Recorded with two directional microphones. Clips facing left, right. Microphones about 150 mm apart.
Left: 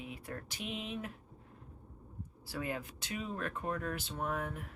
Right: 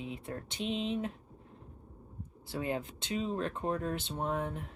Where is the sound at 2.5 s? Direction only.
25° right (ahead or behind).